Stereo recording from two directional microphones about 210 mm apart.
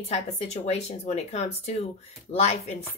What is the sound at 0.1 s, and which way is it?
Speech, 30° left (ahead or behind).